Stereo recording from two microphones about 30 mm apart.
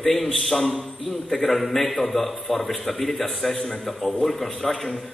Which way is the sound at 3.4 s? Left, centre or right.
Left.